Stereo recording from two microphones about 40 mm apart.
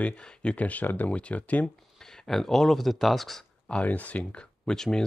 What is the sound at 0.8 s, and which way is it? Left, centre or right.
Speech, left.